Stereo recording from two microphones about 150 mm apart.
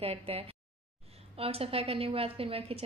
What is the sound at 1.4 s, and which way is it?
A woman's voice, 40° right (ahead or behind).